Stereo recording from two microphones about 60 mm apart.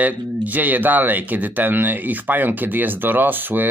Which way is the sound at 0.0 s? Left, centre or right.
Right.